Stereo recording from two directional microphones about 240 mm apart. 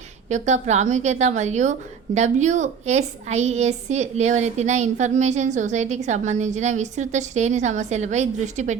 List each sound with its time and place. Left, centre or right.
0.3 s a woman's voice: right